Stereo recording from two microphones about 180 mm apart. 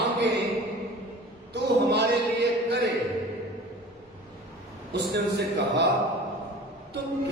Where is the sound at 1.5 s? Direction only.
70° right (ahead or behind).